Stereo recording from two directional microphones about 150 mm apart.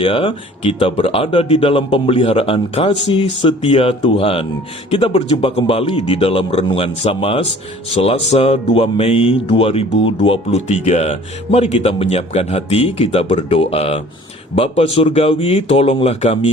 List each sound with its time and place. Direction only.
0.0 s speech: 35° left (ahead or behind)